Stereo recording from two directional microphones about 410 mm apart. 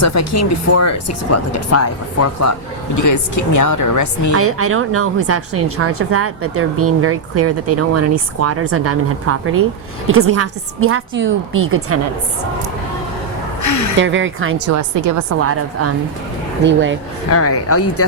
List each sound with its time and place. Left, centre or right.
0.0 s speech: left
4.4 s speech: right
13.6 s a sound: left
13.9 s speech: right
14.7 s a woman's voice: right
15.4 s speech: right
17.2 s speech: left